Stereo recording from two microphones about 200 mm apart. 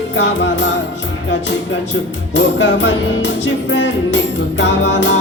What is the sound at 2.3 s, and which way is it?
Music, 65° left (ahead or behind).